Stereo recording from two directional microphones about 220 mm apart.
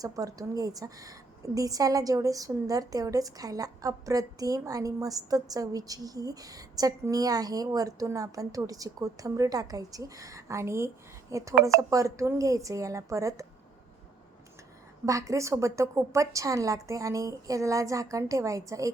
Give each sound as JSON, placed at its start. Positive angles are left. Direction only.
{"t": 0.0, "sound": "a woman's voice", "side_deg": -15}
{"t": 15.0, "sound": "a woman's voice", "side_deg": -15}